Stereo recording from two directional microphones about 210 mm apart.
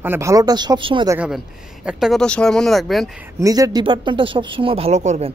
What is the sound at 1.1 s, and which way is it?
Speech, 5° right (ahead or behind).